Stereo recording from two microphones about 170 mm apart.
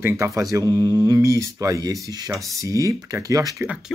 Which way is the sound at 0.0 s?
15° right (ahead or behind).